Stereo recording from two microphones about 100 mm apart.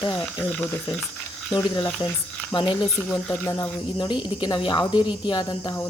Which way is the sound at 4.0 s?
50° left (ahead or behind).